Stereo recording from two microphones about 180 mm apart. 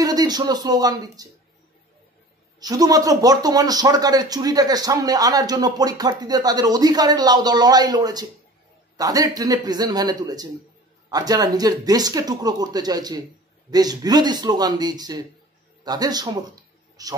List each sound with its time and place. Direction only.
0.0 s speech: 20° right (ahead or behind)
2.6 s speech: 20° right (ahead or behind)